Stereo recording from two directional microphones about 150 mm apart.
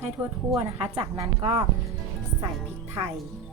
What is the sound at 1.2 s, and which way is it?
Speech, 35° right (ahead or behind).